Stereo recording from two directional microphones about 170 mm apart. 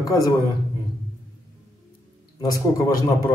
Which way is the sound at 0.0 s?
20° left (ahead or behind).